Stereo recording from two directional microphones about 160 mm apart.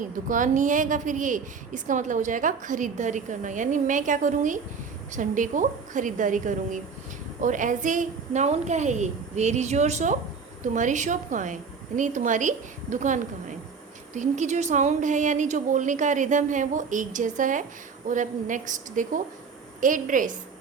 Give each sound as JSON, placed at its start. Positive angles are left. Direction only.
{"t": 0.0, "sound": "a woman's voice", "side_deg": -55}